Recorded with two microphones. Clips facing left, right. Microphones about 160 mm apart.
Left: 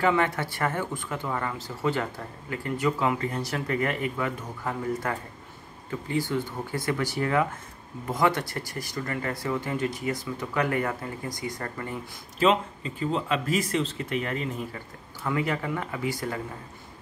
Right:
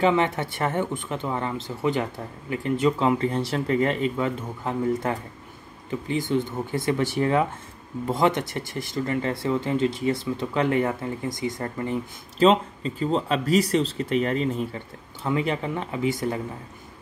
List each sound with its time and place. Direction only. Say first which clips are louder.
0.0 s speech: right 3 dB; 20° right (ahead or behind)